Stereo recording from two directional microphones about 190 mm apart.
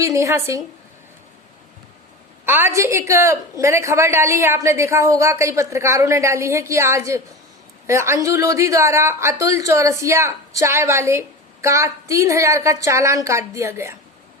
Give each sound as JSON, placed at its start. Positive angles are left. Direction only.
{"t": 0.0, "sound": "a woman's voice", "side_deg": -15}
{"t": 2.5, "sound": "a woman's voice", "side_deg": -10}